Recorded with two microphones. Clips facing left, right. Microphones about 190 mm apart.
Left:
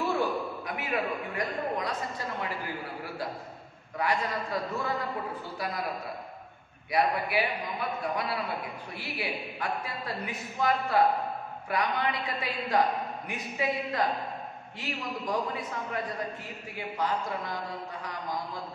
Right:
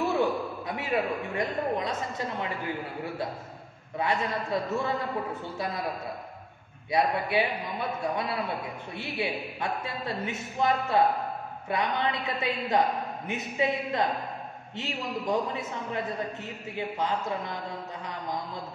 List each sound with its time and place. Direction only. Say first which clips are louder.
0.2 s a man's voice: right 3 dB; 25° right (ahead or behind)
4.0 s a man's voice: right 1 dB; 25° right (ahead or behind)
6.9 s a man's voice: right 1 dB; 25° right (ahead or behind)